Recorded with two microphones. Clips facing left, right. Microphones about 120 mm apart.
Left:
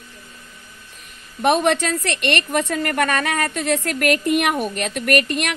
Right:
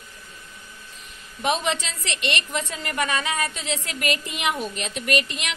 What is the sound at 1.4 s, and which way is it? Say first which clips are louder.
A woman's voice: left 7 dB; 60° left (ahead or behind).